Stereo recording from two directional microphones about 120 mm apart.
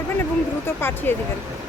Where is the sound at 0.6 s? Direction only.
20° left (ahead or behind).